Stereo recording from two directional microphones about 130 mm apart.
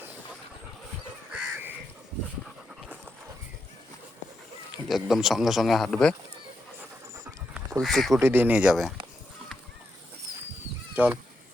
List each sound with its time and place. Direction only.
1.3 s crow: 15° right (ahead or behind)
4.9 s speech: centre (ahead or behind)
7.8 s speech: centre (ahead or behind)
8.2 s speech: 15° right (ahead or behind)
10.9 s speech: 10° right (ahead or behind)